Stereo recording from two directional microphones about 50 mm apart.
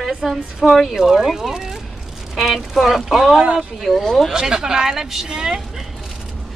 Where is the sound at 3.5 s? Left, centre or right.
Centre.